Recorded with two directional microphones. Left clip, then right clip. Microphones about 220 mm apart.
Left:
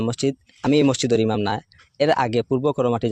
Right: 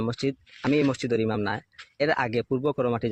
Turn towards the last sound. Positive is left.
turn(degrees=35)  # may be behind; listen again after turning